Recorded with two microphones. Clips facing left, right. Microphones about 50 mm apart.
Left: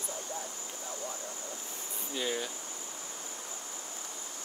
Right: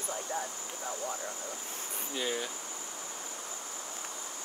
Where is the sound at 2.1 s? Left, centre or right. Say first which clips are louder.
Even; centre.